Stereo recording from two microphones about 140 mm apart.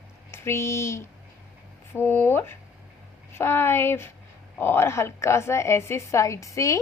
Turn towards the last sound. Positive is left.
turn(degrees=25)  # may be behind; listen again after turning